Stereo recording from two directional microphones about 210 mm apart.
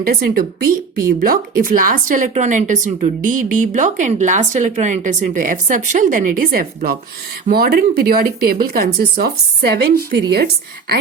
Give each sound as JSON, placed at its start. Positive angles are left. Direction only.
{"t": 0.0, "sound": "speech", "side_deg": -45}